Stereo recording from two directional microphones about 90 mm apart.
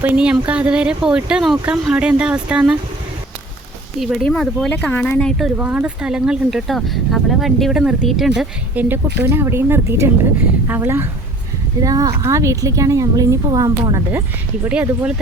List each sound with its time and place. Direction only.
0.0 s speech: 15° right (ahead or behind)
4.2 s speech: 5° left (ahead or behind)
4.7 s speech: 15° left (ahead or behind)
5.5 s speech: 20° right (ahead or behind)
8.7 s speech: 20° right (ahead or behind)
11.8 s speech: 40° right (ahead or behind)
14.1 s speech: 25° right (ahead or behind)
14.7 s speech: 10° right (ahead or behind)